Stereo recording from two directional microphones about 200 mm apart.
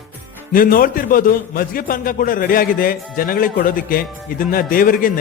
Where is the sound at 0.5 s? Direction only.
45° left (ahead or behind).